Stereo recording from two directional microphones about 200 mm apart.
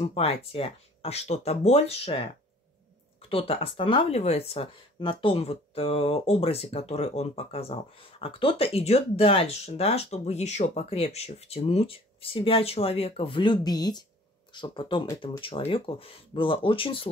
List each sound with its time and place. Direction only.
0.0 s speech: 30° left (ahead or behind)